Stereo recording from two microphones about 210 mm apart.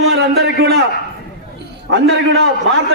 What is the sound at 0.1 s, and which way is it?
Speech, 50° right (ahead or behind).